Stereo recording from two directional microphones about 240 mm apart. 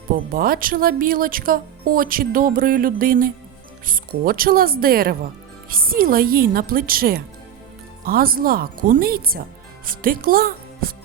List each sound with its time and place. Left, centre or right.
0.3 s speech: right